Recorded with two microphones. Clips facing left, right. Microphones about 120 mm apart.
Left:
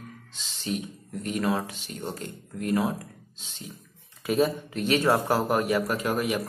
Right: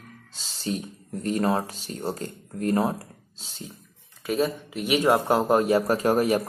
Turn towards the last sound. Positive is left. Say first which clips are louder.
# right 6 dB
turn(degrees=-40)  # may be behind; listen again after turning